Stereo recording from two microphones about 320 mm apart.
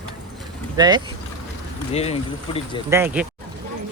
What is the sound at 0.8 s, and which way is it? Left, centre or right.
Speech, centre.